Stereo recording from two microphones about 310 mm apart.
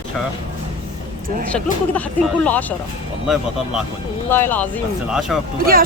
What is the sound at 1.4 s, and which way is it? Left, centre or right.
Speech, centre.